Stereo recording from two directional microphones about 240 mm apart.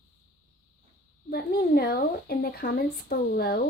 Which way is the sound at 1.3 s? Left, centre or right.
Left.